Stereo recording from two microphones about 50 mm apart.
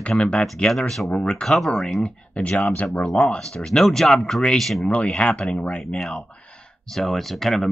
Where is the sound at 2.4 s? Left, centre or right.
Left.